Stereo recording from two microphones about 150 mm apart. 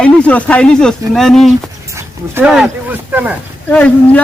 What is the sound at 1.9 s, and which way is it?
Dog, 20° right (ahead or behind).